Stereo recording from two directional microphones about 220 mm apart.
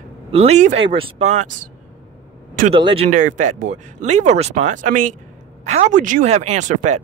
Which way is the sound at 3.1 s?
35° right (ahead or behind).